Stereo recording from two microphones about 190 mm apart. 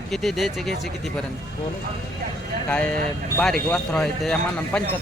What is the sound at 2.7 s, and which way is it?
Speech, 5° left (ahead or behind).